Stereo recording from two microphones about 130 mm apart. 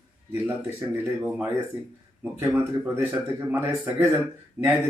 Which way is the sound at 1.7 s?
10° right (ahead or behind).